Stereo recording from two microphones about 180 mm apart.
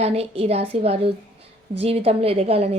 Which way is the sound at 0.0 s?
35° right (ahead or behind).